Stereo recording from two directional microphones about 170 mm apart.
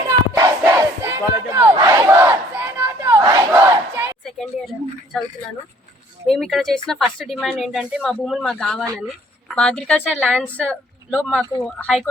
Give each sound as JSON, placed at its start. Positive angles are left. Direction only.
{"t": 0.3, "sound": "battle cry", "side_deg": -20}
{"t": 4.2, "sound": "a sound", "side_deg": 0}
{"t": 5.1, "sound": "speech", "side_deg": 5}